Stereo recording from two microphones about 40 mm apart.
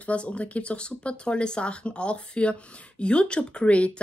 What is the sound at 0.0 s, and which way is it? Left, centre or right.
Speech, left.